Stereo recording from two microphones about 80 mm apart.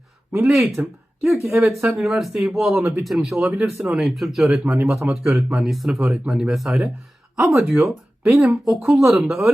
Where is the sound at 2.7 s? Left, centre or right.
Right.